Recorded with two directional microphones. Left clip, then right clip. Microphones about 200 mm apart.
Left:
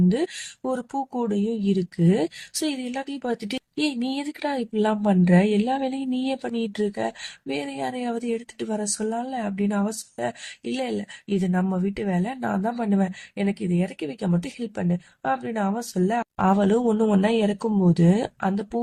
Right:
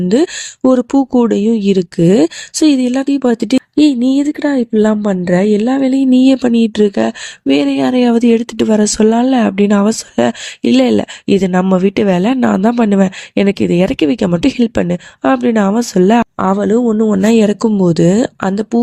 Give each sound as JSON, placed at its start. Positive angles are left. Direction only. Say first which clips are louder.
{"t": 0.1, "sound": "speech", "louder": "right 13 dB", "side_deg": -40}